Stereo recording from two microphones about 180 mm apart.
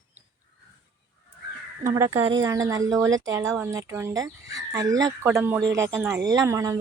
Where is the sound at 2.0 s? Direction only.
15° right (ahead or behind).